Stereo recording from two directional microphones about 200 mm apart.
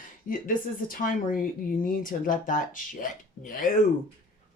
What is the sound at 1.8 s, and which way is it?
Speech, 45° left (ahead or behind).